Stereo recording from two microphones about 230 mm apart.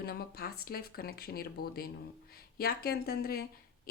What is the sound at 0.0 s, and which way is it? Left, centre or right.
A woman's voice, left.